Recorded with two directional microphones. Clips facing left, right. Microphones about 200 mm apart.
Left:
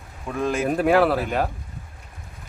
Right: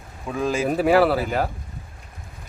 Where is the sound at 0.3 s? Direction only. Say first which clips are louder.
Even; centre (ahead or behind).